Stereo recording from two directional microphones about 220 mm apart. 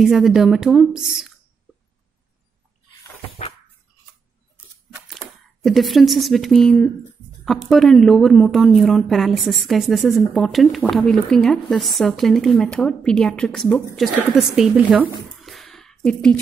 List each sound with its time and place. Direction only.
0.0 s a woman's voice: centre (ahead or behind)
5.0 s a woman's voice: centre (ahead or behind)